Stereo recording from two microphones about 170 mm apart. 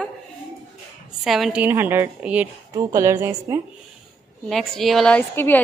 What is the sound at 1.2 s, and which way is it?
A woman's voice, centre (ahead or behind).